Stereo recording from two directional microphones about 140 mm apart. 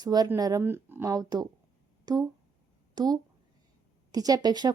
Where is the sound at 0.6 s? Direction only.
15° right (ahead or behind).